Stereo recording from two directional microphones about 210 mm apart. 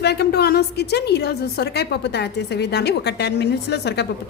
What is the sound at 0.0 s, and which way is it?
A woman's voice, 50° left (ahead or behind).